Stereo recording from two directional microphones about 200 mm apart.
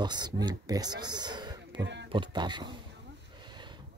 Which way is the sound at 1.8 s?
60° right (ahead or behind).